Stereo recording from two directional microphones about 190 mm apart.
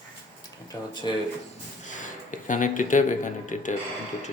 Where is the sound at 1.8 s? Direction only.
40° left (ahead or behind).